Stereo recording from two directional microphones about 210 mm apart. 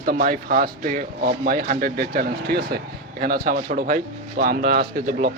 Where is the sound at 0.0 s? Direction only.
45° right (ahead or behind).